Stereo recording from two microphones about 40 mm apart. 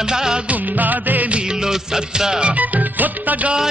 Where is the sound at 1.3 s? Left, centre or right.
Right.